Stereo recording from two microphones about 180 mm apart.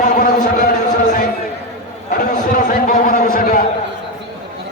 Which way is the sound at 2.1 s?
50° left (ahead or behind).